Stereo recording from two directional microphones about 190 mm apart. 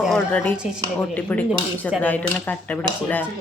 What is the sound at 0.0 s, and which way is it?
A woman's voice, 5° left (ahead or behind).